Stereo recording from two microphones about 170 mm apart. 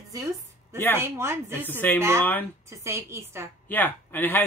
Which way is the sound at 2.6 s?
15° right (ahead or behind).